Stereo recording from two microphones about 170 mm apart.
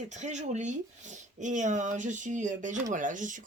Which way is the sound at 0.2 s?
45° right (ahead or behind).